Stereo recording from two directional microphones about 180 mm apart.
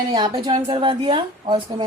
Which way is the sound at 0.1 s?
25° right (ahead or behind).